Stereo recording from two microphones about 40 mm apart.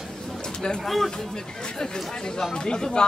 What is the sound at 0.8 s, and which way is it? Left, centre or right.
Speech, centre.